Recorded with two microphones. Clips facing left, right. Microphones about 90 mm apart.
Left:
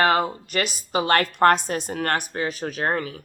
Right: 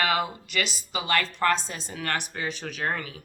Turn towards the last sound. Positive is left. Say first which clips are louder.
# left 5 dB
turn(degrees=40)  # may be behind; listen again after turning